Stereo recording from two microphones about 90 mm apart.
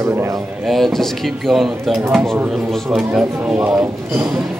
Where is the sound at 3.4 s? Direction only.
20° right (ahead or behind).